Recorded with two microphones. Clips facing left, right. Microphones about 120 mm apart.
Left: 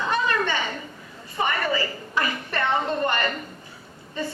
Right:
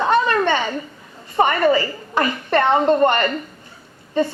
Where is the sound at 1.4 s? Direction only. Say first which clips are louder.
Right 9 dB; 55° right (ahead or behind).